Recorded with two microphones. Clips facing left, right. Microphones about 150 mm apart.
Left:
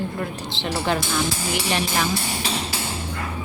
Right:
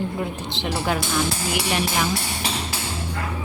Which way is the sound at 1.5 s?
5° right (ahead or behind).